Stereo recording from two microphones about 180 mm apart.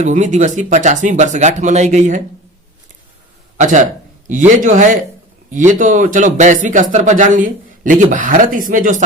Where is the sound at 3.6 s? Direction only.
45° right (ahead or behind).